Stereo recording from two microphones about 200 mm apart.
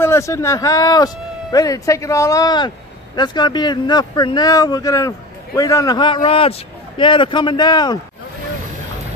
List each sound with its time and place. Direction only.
0.0 s speech: 15° left (ahead or behind)